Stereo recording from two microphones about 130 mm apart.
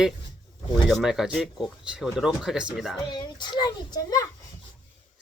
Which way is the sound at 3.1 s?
35° left (ahead or behind).